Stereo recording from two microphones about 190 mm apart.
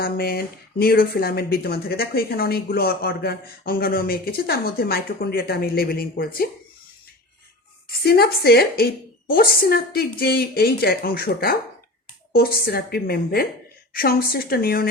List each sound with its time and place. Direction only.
0.0 s speech: 50° left (ahead or behind)
8.0 s a woman's voice: 55° left (ahead or behind)